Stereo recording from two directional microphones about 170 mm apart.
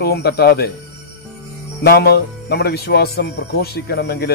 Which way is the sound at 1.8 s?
70° left (ahead or behind).